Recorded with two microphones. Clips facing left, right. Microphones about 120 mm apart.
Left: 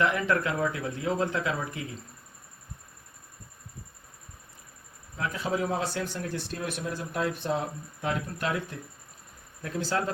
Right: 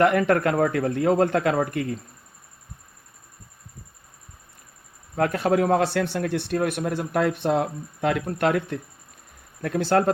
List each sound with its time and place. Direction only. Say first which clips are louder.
0.0 s speech: right 7 dB; 60° right (ahead or behind)
5.1 s speech: right 9 dB; 65° right (ahead or behind)